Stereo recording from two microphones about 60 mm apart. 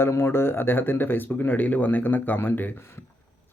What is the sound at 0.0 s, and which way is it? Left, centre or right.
Speech, left.